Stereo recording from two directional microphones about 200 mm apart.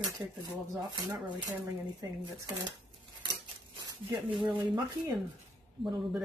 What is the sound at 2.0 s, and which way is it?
Speech, 20° right (ahead or behind).